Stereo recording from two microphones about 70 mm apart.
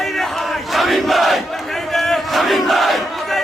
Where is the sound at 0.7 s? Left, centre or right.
Centre.